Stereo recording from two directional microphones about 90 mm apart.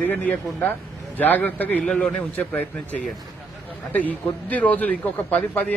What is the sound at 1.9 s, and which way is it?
Speech, 10° left (ahead or behind).